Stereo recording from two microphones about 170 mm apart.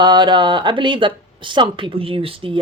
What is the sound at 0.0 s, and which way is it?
Speech, 25° right (ahead or behind).